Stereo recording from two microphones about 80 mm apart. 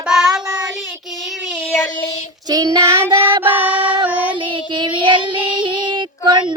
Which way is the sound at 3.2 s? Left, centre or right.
Right.